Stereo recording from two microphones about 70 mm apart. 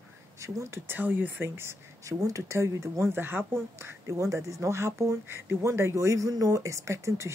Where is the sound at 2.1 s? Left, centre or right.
Right.